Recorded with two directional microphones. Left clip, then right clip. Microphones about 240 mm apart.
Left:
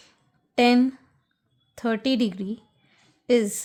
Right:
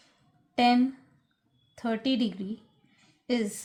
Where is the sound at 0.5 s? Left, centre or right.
Left.